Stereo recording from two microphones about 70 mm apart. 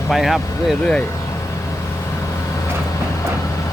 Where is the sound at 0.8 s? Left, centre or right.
Centre.